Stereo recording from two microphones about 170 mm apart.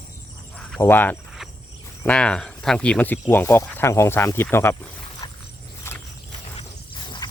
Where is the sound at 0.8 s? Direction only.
10° left (ahead or behind).